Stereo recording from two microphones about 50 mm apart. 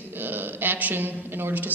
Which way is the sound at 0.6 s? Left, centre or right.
Right.